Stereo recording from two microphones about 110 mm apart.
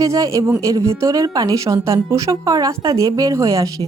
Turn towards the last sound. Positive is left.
turn(degrees=-30)  # may be behind; listen again after turning